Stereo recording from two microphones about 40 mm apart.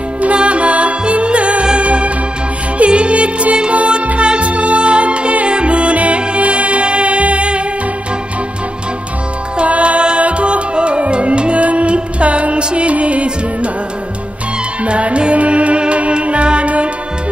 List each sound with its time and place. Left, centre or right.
0.2 s music: right
9.6 s music: right
14.8 s music: right